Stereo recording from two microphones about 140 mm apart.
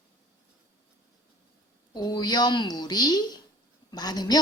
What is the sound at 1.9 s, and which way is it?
A woman's voice, 30° left (ahead or behind).